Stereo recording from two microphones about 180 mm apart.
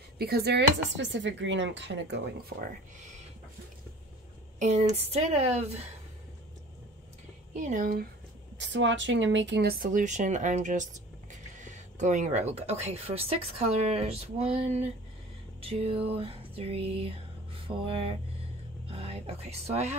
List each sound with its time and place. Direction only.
0.2 s speech: 60° right (ahead or behind)
2.5 s speech: 60° right (ahead or behind)
4.6 s music: 40° right (ahead or behind)
7.5 s speech: 45° right (ahead or behind)
8.5 s speech: 90° right; by 13.4 s 35° right (ahead or behind)
13.8 s music: 35° right (ahead or behind)
17.6 s a sound: 30° right (ahead or behind)
18.9 s speech: 35° right (ahead or behind)